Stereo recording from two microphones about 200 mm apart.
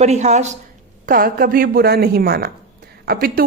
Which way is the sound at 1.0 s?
45° right (ahead or behind).